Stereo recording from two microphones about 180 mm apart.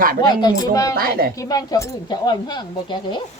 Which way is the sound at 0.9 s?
55° right (ahead or behind).